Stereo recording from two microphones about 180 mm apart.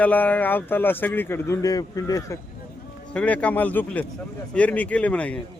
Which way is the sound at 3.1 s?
5° left (ahead or behind).